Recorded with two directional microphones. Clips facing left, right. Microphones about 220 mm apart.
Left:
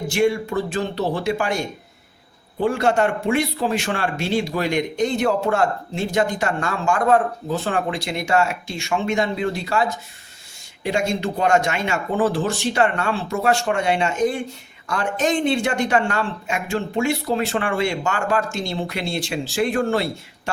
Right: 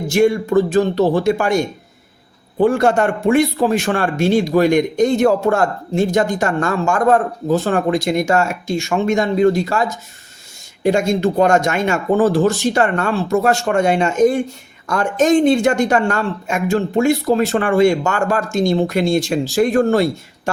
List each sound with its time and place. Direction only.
0.1 s a man's voice: 45° right (ahead or behind)